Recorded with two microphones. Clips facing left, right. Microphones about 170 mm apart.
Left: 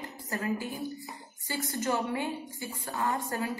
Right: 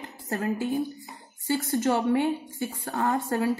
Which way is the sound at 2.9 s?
40° right (ahead or behind).